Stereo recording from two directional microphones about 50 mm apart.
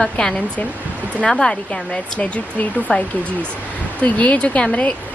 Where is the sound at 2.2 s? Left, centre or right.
Left.